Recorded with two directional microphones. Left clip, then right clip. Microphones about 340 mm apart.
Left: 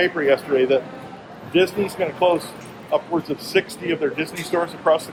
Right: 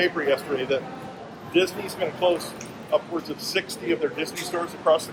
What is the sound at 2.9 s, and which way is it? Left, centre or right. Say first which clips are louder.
Speech: left 3 dB; left.